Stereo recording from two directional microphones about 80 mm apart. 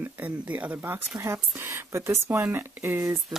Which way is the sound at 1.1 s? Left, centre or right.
Right.